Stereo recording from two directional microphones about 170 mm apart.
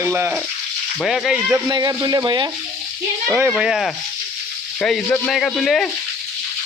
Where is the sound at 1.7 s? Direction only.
25° right (ahead or behind).